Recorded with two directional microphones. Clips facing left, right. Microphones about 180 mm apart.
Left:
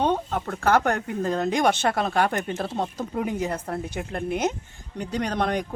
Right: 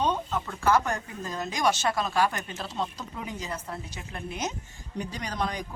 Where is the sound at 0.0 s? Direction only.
55° left (ahead or behind).